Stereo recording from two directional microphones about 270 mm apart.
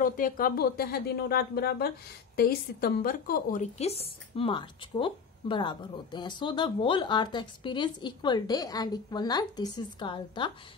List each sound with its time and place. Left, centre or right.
0.0 s a woman's voice: left